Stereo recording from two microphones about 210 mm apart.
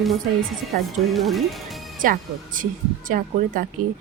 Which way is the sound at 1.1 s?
Centre (ahead or behind).